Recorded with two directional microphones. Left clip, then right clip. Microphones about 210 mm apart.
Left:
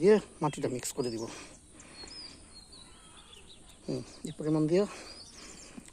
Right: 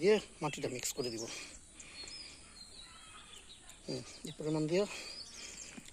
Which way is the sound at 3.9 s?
15° left (ahead or behind).